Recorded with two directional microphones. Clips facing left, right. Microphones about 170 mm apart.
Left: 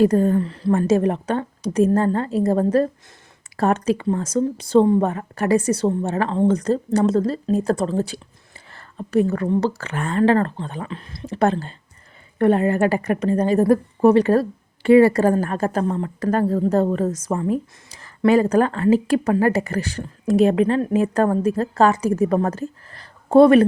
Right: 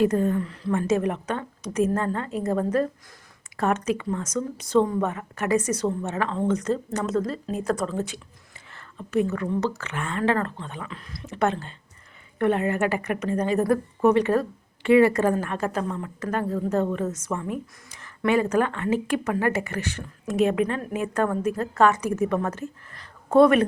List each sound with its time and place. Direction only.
0.0 s a woman's voice: 35° left (ahead or behind)